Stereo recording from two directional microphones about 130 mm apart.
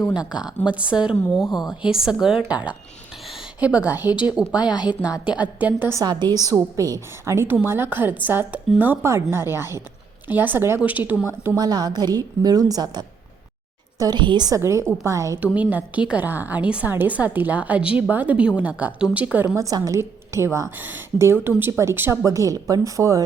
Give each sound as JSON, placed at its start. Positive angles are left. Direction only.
{"t": 0.1, "sound": "a woman's voice", "side_deg": -5}
{"t": 4.6, "sound": "a woman's voice", "side_deg": 35}
{"t": 5.3, "sound": "a woman's voice", "side_deg": -10}
{"t": 6.0, "sound": "a woman's voice", "side_deg": -35}
{"t": 11.5, "sound": "a woman's voice", "side_deg": -30}
{"t": 15.5, "sound": "a woman's voice", "side_deg": -10}
{"t": 19.5, "sound": "a woman's voice", "side_deg": -25}